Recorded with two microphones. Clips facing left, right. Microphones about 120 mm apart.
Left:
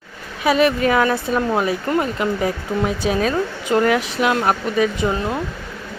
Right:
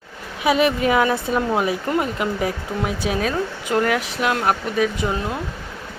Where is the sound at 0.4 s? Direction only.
15° right (ahead or behind).